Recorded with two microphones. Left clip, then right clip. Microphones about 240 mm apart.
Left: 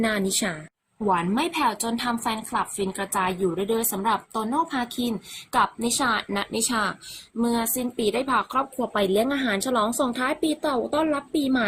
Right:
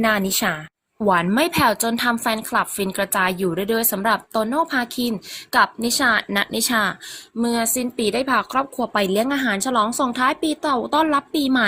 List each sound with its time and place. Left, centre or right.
0.0 s a woman's voice: centre